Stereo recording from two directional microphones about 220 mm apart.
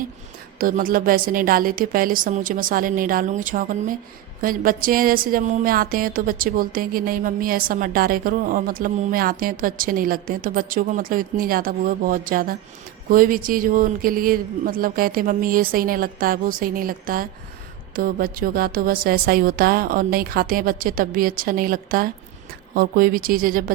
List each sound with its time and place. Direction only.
0.6 s speech: 40° right (ahead or behind)